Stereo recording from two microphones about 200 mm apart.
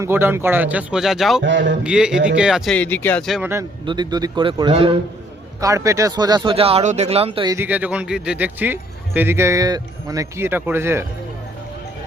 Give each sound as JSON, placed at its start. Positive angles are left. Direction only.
{"t": 0.0, "sound": "a man's voice", "side_deg": -10}
{"t": 1.5, "sound": "speech", "side_deg": -65}
{"t": 1.8, "sound": "speech", "side_deg": -5}
{"t": 3.5, "sound": "speech", "side_deg": -20}
{"t": 5.5, "sound": "speech", "side_deg": -15}
{"t": 7.5, "sound": "a man's voice", "side_deg": -10}